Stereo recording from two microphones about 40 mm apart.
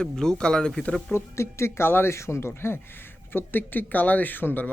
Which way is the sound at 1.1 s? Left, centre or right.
Left.